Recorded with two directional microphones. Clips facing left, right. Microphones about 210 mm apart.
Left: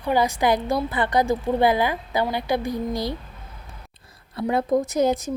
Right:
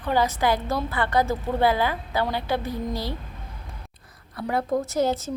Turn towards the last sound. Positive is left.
turn(degrees=15)  # may be behind; listen again after turning